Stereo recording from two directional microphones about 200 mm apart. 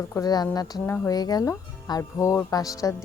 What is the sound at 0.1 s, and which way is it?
Speech, 20° left (ahead or behind).